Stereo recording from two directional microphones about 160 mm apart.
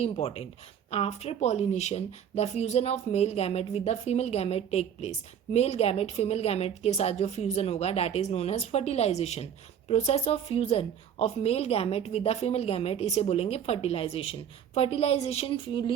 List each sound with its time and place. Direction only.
0.0 s a woman's voice: 40° left (ahead or behind)